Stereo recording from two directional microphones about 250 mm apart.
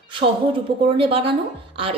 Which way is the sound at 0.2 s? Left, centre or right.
Right.